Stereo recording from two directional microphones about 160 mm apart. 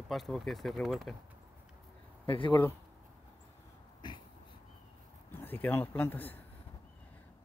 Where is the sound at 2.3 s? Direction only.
30° left (ahead or behind).